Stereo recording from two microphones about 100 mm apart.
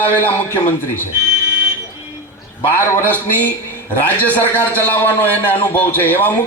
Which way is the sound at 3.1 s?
20° left (ahead or behind).